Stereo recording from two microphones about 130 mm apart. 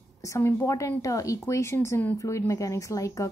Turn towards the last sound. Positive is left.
turn(degrees=25)  # may be behind; listen again after turning